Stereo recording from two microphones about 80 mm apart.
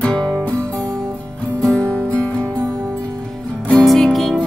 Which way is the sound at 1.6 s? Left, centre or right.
Centre.